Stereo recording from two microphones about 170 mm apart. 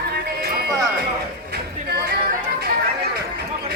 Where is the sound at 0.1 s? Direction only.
70° right (ahead or behind).